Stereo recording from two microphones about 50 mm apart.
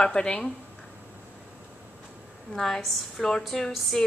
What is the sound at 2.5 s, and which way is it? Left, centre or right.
A woman's voice, centre.